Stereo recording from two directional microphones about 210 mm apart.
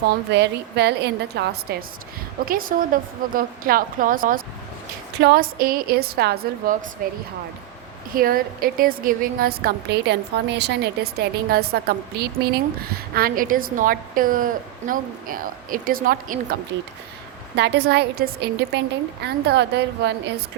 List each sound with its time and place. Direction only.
0.3 s a woman's voice: 55° right (ahead or behind)
17.6 s a woman's voice: 50° right (ahead or behind)